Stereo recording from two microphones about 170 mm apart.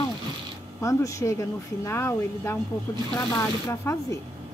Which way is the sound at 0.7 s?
20° left (ahead or behind).